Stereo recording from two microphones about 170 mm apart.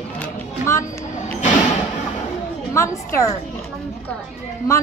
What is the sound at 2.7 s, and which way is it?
Speech, 15° left (ahead or behind).